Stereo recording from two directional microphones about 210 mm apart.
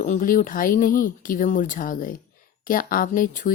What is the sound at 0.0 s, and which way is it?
A woman's voice, 40° left (ahead or behind).